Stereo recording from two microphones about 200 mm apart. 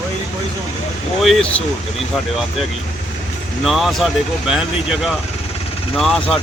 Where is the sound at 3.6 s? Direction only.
Centre (ahead or behind).